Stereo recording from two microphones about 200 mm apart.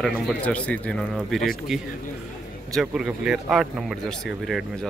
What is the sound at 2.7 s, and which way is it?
Speech, centre (ahead or behind).